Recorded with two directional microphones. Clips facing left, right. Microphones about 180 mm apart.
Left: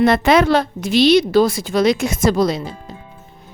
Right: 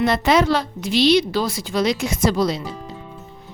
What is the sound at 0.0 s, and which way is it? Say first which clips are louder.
A woman's voice: left 4 dB; 55° left (ahead or behind).